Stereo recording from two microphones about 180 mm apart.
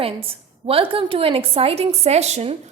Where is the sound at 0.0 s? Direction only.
30° right (ahead or behind).